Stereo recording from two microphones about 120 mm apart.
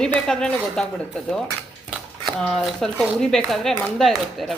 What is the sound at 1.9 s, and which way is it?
Speech, 5° left (ahead or behind).